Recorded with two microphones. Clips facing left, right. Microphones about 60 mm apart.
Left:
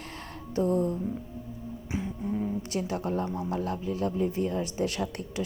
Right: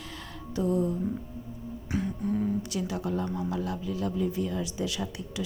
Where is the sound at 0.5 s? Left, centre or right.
Left.